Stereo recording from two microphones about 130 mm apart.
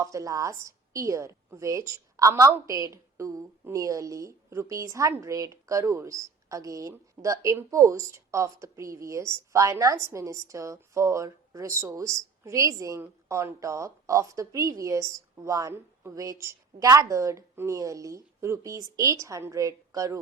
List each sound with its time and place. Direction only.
0.0 s a woman's voice: 25° right (ahead or behind)